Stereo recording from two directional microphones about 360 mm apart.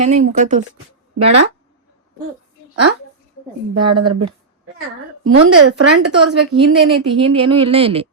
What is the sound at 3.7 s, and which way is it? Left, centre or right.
Speech, right.